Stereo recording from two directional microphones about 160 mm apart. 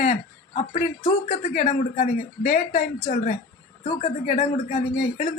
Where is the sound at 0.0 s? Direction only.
45° left (ahead or behind).